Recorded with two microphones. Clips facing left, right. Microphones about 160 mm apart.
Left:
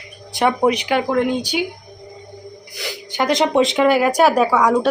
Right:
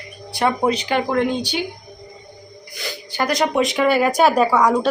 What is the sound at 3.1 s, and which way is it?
Speech, 20° left (ahead or behind).